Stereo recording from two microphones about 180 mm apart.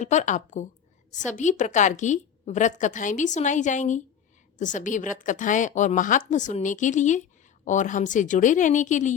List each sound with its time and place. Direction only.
0.0 s a woman's voice: 40° left (ahead or behind)